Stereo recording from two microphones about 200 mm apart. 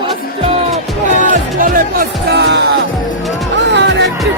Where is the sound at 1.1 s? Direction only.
45° right (ahead or behind).